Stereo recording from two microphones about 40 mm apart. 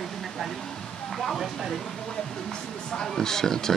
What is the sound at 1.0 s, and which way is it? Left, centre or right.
Speech, centre.